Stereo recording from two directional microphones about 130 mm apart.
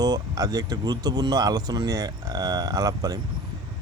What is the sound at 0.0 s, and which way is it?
Speech, 25° right (ahead or behind).